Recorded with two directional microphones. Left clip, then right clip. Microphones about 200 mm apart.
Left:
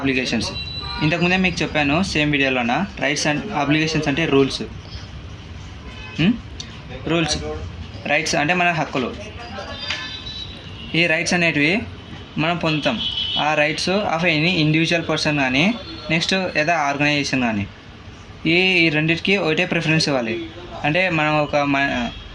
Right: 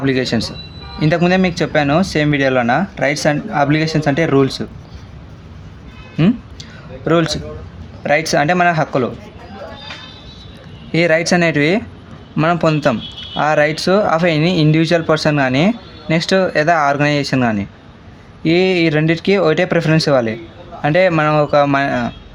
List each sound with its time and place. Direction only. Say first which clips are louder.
0.0 s speech: right 4 dB; 60° right (ahead or behind)
6.1 s music: right 4 dB; 60° right (ahead or behind)
7.1 s speech: right 5 dB; 60° right (ahead or behind)
10.9 s speech: right 5 dB; 60° right (ahead or behind)